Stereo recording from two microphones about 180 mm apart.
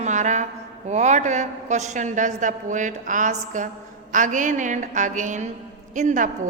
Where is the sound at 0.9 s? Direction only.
40° right (ahead or behind).